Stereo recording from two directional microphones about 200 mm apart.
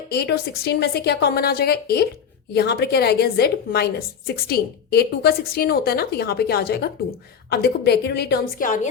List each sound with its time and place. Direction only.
0.1 s a woman's voice: 55° left (ahead or behind)